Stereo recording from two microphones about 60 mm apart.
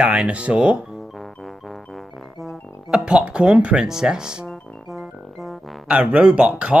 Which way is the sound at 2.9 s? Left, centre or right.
Centre.